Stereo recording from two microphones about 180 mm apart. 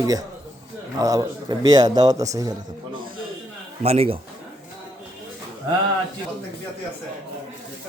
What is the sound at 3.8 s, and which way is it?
Speech, 35° right (ahead or behind).